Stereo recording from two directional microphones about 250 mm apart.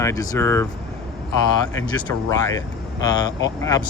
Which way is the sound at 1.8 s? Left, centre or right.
Centre.